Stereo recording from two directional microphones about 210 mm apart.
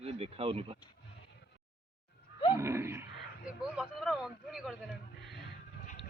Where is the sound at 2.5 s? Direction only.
10° right (ahead or behind).